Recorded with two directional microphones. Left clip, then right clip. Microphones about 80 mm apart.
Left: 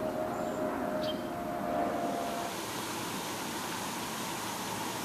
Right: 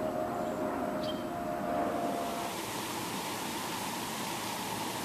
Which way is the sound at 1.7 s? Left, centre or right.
Right.